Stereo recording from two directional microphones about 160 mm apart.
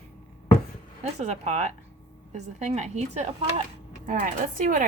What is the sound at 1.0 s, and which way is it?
Speech, 45° right (ahead or behind).